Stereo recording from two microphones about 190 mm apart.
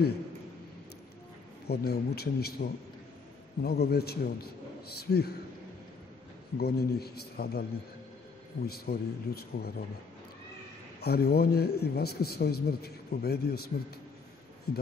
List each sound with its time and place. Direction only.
1.7 s speech: 55° left (ahead or behind)
6.6 s speech: 55° left (ahead or behind)
8.6 s speech: 55° left (ahead or behind)
11.0 s speech: 55° left (ahead or behind)
14.7 s speech: 55° left (ahead or behind)